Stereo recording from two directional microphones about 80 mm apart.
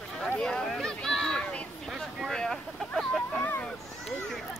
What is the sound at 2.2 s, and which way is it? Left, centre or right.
Vehicle, centre.